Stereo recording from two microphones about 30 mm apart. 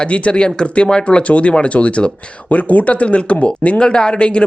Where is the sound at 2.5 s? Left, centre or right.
Left.